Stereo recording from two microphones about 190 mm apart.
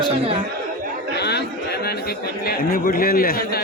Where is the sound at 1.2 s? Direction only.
60° left (ahead or behind).